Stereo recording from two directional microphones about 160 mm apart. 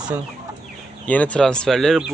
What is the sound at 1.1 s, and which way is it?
Speech, 10° left (ahead or behind).